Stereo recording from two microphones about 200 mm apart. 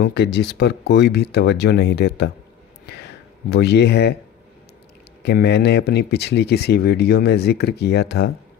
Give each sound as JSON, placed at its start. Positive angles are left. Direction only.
{"t": 0.0, "sound": "speech", "side_deg": 55}
{"t": 2.9, "sound": "a sound", "side_deg": 55}
{"t": 5.2, "sound": "speech", "side_deg": 55}